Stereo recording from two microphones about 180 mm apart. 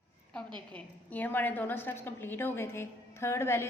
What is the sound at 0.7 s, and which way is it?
A woman's voice, 10° left (ahead or behind).